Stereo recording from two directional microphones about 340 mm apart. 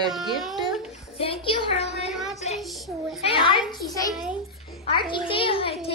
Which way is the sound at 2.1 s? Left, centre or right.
Centre.